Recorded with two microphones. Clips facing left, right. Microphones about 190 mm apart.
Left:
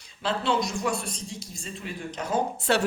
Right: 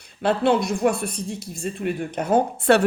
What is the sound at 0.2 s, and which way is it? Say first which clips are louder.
Speech: right 7 dB; 60° right (ahead or behind).